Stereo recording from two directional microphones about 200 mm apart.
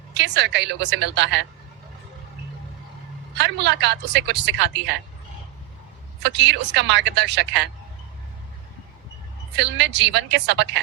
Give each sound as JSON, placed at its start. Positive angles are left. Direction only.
{"t": 0.1, "sound": "speech", "side_deg": -60}
{"t": 3.3, "sound": "speech", "side_deg": -60}
{"t": 6.2, "sound": "speech", "side_deg": -60}
{"t": 9.6, "sound": "speech", "side_deg": -60}